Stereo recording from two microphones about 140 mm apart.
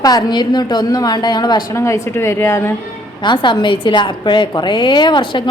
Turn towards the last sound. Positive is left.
turn(degrees=35)  # may be behind; listen again after turning